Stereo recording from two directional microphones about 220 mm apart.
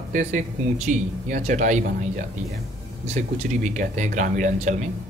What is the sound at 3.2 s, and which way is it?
Speech, 35° right (ahead or behind).